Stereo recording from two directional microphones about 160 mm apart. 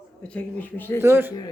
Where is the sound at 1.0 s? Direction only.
15° right (ahead or behind).